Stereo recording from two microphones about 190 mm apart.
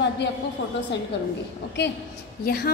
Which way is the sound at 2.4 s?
55° left (ahead or behind).